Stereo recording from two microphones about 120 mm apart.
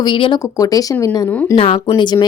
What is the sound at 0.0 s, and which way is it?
Speech, 45° left (ahead or behind).